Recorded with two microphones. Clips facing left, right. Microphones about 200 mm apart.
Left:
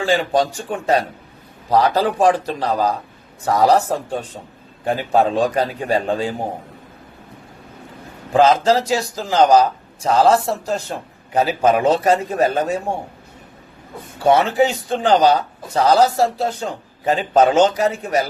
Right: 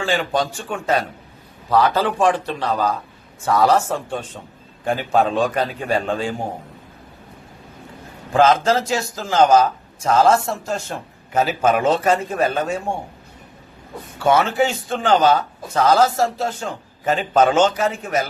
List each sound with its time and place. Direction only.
0.0 s a man's voice: 35° left (ahead or behind)
8.3 s a man's voice: 35° left (ahead or behind)
14.2 s a man's voice: 35° left (ahead or behind)